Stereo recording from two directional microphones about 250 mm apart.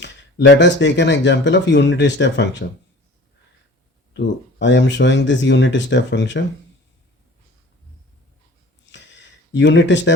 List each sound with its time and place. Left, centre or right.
0.0 s speech: left
4.6 s speech: left
8.9 s a sound: left